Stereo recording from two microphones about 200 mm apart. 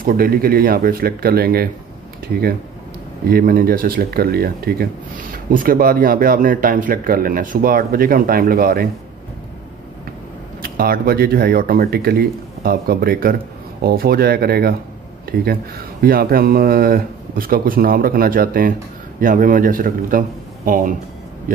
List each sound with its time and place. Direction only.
0.0 s speech: 45° right (ahead or behind)
3.3 s speech: 45° right (ahead or behind)
10.6 s speech: 50° right (ahead or behind)
16.0 s speech: 50° right (ahead or behind)